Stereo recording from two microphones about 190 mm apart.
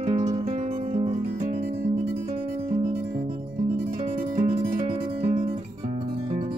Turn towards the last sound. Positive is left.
turn(degrees=-35)  # may be behind; listen again after turning